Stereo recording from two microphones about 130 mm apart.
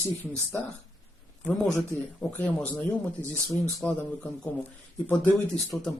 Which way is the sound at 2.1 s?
10° left (ahead or behind).